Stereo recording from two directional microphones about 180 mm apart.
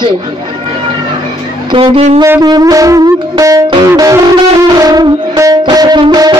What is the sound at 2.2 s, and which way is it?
Music, 20° right (ahead or behind).